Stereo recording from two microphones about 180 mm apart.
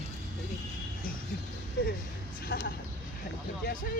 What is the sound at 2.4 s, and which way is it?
A woman's voice, 60° left (ahead or behind).